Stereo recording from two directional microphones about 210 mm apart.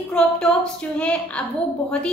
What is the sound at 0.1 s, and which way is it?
A woman's voice, 5° left (ahead or behind).